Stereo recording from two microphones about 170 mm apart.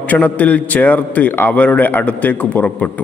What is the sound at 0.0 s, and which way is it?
A man's voice, 10° left (ahead or behind).